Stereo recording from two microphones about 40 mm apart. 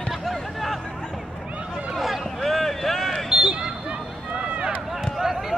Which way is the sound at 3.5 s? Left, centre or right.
Centre.